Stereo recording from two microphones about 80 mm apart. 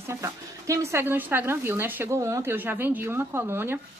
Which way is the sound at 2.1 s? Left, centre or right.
Right.